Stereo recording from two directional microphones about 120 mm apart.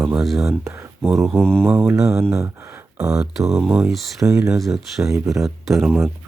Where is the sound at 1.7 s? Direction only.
10° right (ahead or behind).